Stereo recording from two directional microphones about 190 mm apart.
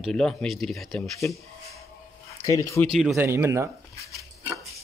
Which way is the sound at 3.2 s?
15° right (ahead or behind).